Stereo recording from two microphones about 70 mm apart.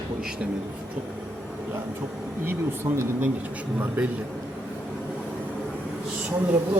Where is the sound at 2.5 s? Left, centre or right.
Right.